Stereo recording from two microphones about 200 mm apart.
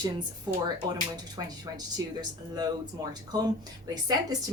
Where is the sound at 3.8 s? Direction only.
20° right (ahead or behind).